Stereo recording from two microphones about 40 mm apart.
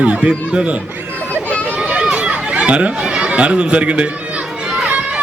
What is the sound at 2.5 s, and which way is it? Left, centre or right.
Chatter, right.